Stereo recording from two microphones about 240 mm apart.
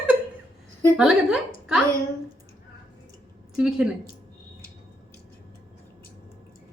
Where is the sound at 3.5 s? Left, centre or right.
Centre.